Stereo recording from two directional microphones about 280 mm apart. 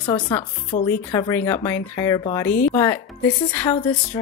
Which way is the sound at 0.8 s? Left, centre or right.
Centre.